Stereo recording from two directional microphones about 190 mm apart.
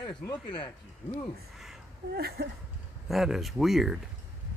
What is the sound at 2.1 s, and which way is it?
Speech, 55° right (ahead or behind).